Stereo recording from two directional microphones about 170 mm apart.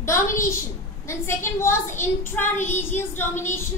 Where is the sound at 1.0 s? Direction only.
15° left (ahead or behind).